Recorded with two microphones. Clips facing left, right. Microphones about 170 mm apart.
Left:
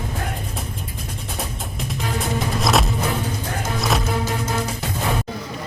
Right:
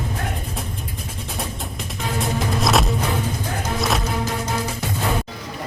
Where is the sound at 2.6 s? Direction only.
Centre (ahead or behind).